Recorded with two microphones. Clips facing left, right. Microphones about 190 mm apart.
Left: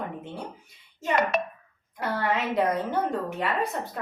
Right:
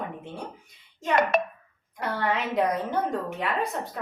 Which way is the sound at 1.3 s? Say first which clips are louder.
Right 3 dB; 50° right (ahead or behind).